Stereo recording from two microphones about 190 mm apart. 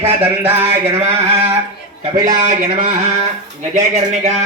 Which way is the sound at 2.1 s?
20° right (ahead or behind).